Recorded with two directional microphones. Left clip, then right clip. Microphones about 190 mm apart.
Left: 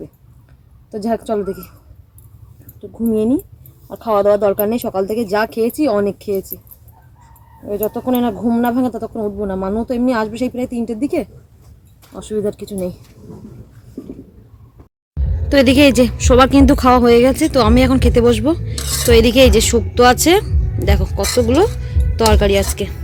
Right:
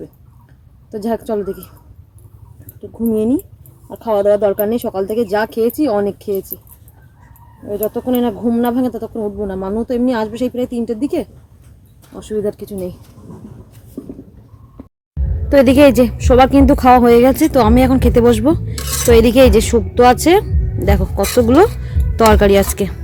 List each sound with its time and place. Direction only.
0.9 s speech: 5° right (ahead or behind)
3.1 s speech: 5° right (ahead or behind)
7.7 s speech: 5° right (ahead or behind)
14.0 s a sound: 55° right (ahead or behind)
15.1 s speech: 10° right (ahead or behind)
21.2 s speech: 30° right (ahead or behind)